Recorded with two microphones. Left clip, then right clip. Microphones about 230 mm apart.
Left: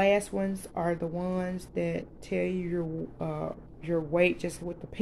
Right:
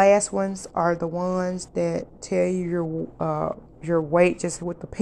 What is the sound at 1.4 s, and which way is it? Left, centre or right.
Speech, centre.